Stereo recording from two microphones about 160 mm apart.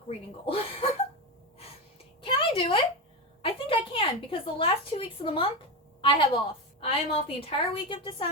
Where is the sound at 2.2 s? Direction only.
30° left (ahead or behind).